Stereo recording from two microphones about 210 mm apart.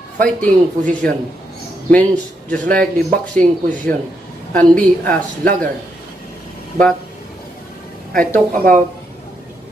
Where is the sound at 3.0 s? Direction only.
40° right (ahead or behind).